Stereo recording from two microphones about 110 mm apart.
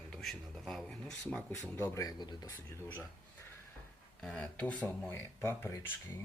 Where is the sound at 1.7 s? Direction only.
25° left (ahead or behind).